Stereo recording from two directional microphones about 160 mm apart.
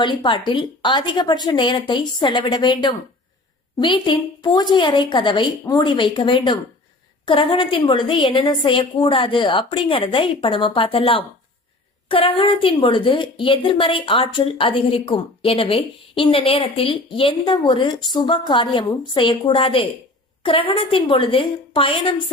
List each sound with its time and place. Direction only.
0.0 s a woman's voice: 30° left (ahead or behind)